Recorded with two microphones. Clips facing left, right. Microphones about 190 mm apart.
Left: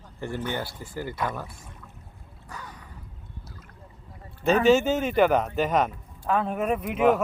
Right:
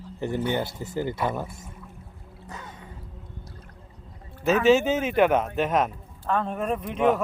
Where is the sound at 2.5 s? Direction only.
25° right (ahead or behind).